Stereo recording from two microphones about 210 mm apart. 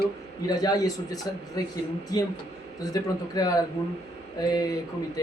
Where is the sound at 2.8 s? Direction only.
15° left (ahead or behind).